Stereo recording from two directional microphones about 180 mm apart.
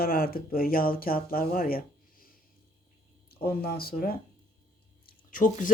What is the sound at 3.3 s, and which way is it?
Speech, 60° left (ahead or behind).